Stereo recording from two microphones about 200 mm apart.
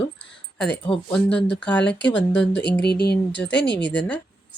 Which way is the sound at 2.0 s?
65° left (ahead or behind).